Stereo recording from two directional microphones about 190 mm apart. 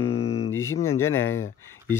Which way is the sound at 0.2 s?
35° left (ahead or behind).